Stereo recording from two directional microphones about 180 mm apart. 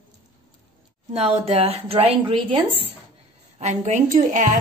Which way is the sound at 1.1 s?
35° right (ahead or behind).